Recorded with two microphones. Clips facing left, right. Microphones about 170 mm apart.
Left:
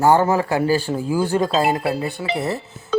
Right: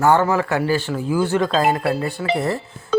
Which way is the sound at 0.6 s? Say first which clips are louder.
Left 2 dB; 40° left (ahead or behind).